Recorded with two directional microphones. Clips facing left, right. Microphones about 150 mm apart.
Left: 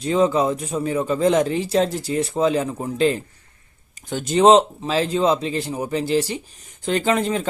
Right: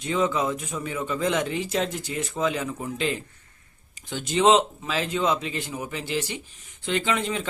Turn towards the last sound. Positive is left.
turn(degrees=40)  # may be behind; listen again after turning